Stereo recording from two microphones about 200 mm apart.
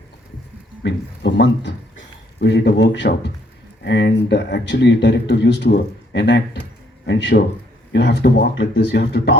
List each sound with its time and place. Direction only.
0.8 s speech: 60° left (ahead or behind)